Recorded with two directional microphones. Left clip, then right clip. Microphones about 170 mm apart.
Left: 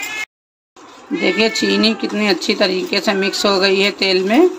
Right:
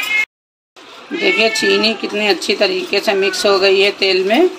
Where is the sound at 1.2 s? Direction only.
60° left (ahead or behind).